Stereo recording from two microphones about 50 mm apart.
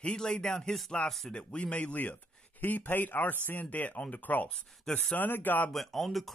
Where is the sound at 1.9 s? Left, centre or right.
Left.